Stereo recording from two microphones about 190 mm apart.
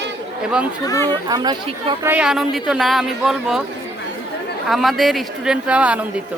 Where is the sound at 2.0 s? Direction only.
10° right (ahead or behind).